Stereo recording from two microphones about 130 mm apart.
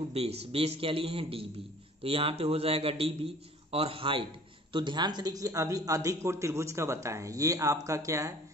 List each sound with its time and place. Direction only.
0.1 s a man's voice: 50° right (ahead or behind); by 8.4 s 25° right (ahead or behind)